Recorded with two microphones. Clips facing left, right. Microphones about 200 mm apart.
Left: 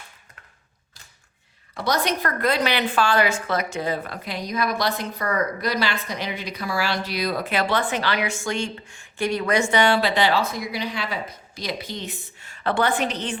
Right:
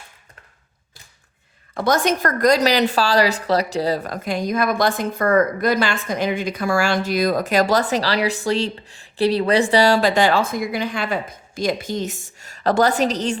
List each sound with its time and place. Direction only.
1.7 s a woman's voice: 50° right (ahead or behind)